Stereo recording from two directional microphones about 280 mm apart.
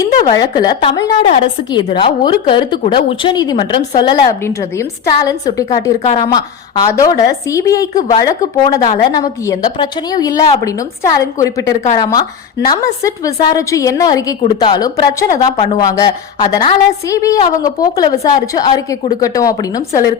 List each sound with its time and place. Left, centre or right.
0.0 s a woman's voice: centre
7.9 s a woman's voice: left
8.2 s a woman's voice: centre